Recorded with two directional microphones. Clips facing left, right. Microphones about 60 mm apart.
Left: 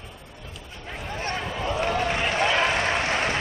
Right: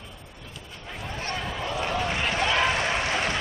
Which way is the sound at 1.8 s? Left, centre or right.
Left.